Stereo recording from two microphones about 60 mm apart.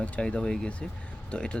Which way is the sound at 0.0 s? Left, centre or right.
Centre.